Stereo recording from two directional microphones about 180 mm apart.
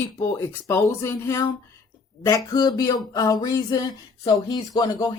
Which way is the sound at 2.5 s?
20° left (ahead or behind).